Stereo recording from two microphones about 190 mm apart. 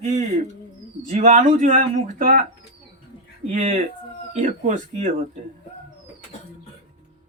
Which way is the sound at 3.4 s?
35° right (ahead or behind).